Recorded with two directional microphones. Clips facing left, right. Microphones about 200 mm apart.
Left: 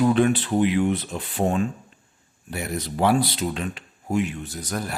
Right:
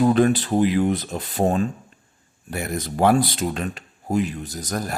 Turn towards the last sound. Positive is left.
turn(degrees=-40)  # may be behind; listen again after turning